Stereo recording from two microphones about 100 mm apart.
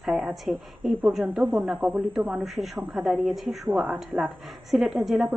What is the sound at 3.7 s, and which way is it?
A woman's voice, 15° right (ahead or behind).